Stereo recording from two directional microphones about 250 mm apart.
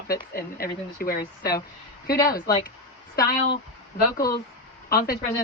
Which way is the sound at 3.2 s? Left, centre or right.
Left.